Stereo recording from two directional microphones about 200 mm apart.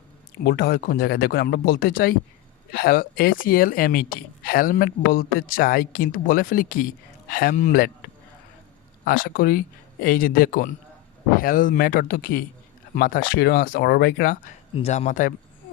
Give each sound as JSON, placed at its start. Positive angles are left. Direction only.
{"t": 0.4, "sound": "a woman's voice", "side_deg": 50}
{"t": 9.0, "sound": "a woman's voice", "side_deg": 45}
{"t": 14.8, "sound": "speech", "side_deg": 35}